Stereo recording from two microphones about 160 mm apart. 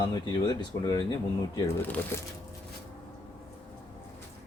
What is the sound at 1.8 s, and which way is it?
Speech, 10° left (ahead or behind).